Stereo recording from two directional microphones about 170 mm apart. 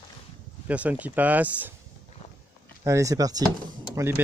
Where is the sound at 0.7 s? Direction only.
10° right (ahead or behind).